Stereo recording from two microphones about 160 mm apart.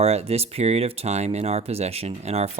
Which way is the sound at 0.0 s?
40° right (ahead or behind).